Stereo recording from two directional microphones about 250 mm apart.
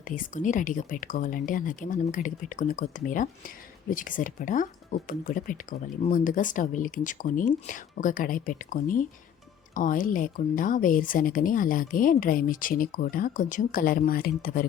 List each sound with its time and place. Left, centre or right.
0.1 s speech: left